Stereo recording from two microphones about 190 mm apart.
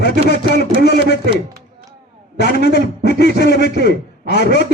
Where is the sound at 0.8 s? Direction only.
60° left (ahead or behind).